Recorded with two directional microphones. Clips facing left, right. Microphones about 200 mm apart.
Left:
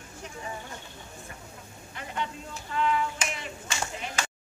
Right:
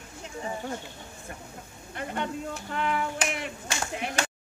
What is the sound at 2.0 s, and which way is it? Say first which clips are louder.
Clapping: right 4 dB; 55° right (ahead or behind).